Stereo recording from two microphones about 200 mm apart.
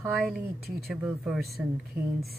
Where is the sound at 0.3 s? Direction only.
Centre (ahead or behind).